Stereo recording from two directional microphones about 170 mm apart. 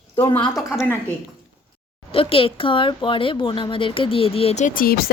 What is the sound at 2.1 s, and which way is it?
Speech, 35° left (ahead or behind).